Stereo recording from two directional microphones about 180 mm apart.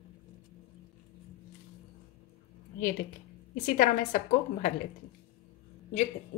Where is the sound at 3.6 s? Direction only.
45° left (ahead or behind).